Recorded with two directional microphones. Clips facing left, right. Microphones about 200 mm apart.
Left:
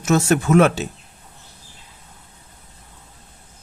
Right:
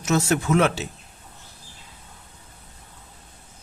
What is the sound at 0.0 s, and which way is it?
Speech, 50° left (ahead or behind).